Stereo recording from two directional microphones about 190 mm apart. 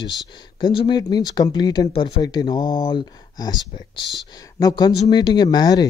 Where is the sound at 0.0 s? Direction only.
25° left (ahead or behind).